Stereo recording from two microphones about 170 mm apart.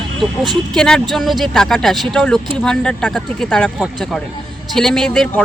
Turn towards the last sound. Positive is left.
turn(degrees=5)  # may be behind; listen again after turning